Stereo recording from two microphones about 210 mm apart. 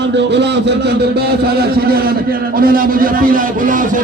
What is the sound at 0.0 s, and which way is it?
A man's voice, 55° right (ahead or behind).